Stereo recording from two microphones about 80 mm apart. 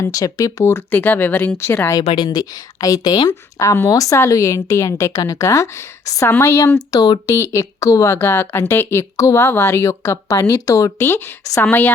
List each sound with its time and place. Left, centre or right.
0.0 s speech: left
0.6 s speech: left
1.9 s speech: left
6.9 s speech: left
7.3 s speech: left
11.6 s speech: left